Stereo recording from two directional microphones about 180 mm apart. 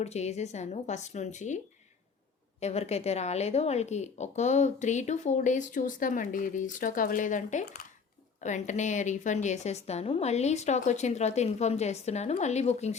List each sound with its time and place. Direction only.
0.0 s speech: 40° left (ahead or behind)
2.6 s speech: 35° left (ahead or behind)